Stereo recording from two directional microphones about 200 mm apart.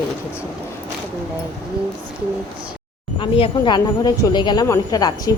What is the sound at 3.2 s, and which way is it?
Speech, 25° left (ahead or behind).